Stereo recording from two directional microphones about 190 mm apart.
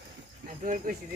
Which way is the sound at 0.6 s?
40° right (ahead or behind).